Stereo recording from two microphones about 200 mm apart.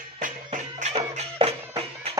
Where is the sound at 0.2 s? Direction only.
40° right (ahead or behind).